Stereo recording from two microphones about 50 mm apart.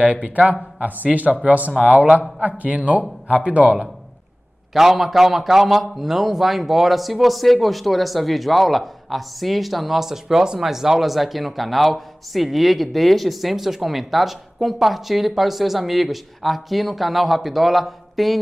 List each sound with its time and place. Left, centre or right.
0.0 s speech: right
4.7 s a man's voice: centre